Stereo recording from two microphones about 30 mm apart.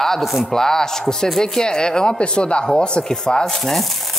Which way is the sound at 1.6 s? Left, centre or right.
Left.